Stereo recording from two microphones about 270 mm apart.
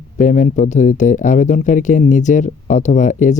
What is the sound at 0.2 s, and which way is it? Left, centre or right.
Speech, left.